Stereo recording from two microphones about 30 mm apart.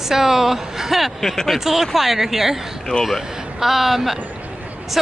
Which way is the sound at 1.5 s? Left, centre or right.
Centre.